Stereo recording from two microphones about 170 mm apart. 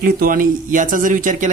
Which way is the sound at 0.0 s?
55° right (ahead or behind).